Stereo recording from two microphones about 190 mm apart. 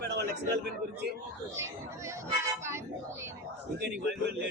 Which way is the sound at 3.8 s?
60° right (ahead or behind).